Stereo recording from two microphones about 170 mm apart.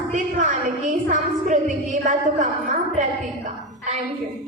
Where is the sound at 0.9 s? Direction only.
50° right (ahead or behind).